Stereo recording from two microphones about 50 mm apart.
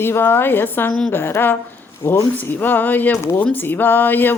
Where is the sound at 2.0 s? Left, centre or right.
Left.